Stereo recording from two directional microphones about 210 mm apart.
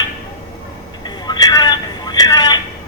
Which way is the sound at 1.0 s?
20° left (ahead or behind).